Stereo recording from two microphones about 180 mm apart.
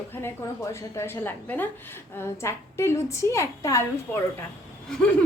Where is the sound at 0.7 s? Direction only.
15° left (ahead or behind).